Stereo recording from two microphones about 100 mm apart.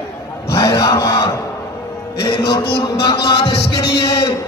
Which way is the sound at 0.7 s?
35° left (ahead or behind).